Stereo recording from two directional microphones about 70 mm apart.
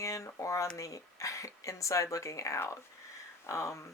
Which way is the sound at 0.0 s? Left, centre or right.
Left.